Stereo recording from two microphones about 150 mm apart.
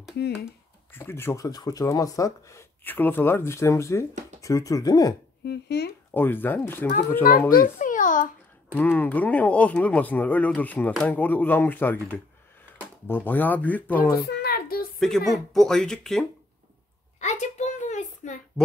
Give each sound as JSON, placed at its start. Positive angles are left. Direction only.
{"t": 0.2, "sound": "speech", "side_deg": 90}
{"t": 0.9, "sound": "speech", "side_deg": 15}
{"t": 5.4, "sound": "speech", "side_deg": 90}
{"t": 6.1, "sound": "speech", "side_deg": 15}
{"t": 7.5, "sound": "a sound", "side_deg": 70}
{"t": 8.7, "sound": "speech", "side_deg": 10}
{"t": 14.2, "sound": "a sound", "side_deg": 90}
{"t": 15.0, "sound": "speech", "side_deg": 0}
{"t": 17.2, "sound": "a sound", "side_deg": 50}